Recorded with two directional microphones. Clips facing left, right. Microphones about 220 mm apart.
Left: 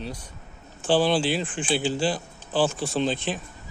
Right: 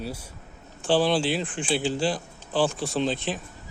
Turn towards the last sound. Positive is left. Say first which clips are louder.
# left 1 dB
turn(degrees=0)  # may be behind; listen again after turning